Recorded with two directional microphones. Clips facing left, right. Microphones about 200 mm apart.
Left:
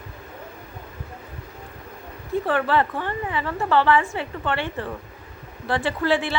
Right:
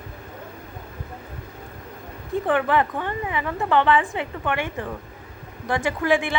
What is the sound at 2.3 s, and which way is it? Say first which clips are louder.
A woman's voice: even; 15° right (ahead or behind).